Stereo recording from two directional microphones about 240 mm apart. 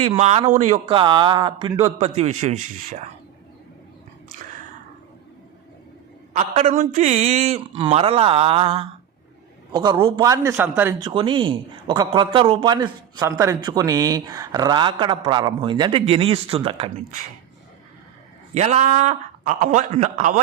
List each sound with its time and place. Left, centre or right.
0.2 s a man's voice: right
6.3 s a man's voice: right; by 10.9 s centre
11.0 s a man's voice: centre
18.5 s a man's voice: right